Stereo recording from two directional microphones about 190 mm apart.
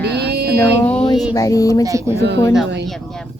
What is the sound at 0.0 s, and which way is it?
Music, 60° right (ahead or behind).